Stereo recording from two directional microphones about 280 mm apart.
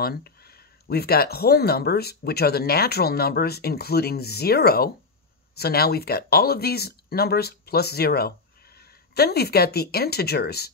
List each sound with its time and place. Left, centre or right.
0.0 s speech: left